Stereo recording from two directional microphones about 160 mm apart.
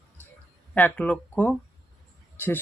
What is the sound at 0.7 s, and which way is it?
Speech, 10° left (ahead or behind).